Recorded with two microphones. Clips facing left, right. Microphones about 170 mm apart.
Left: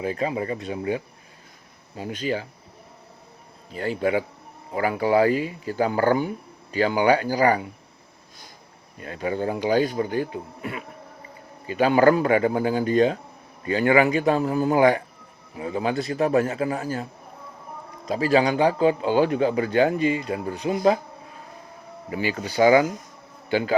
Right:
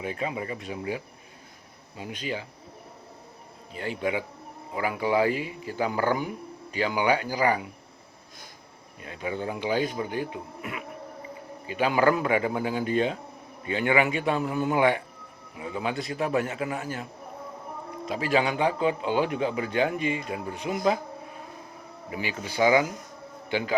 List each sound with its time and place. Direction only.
0.0 s speech: 35° left (ahead or behind)
3.8 s speech: 40° left (ahead or behind)
9.0 s speech: 45° left (ahead or behind)
22.2 s a man's voice: 35° left (ahead or behind)